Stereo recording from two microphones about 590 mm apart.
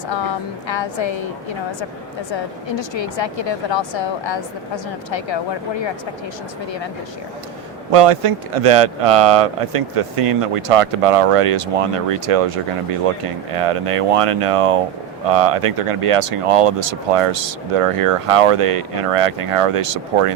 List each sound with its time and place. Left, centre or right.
0.7 s a woman's voice: left
2.7 s a woman's voice: left
7.9 s speech: right